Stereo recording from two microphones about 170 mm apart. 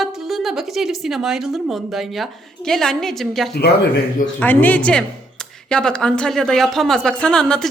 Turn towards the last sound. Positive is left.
turn(degrees=5)  # may be behind; listen again after turning